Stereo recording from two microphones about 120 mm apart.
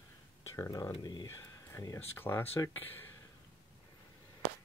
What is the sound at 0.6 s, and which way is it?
Speech, 30° left (ahead or behind).